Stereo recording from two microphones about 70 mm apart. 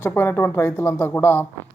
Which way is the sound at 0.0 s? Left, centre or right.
Left.